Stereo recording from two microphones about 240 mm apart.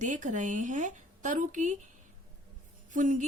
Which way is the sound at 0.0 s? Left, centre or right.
Right.